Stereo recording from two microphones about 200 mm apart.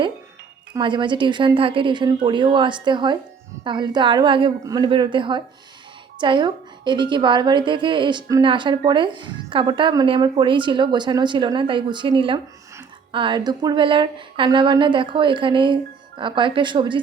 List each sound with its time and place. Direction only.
0.7 s a woman's voice: 25° right (ahead or behind)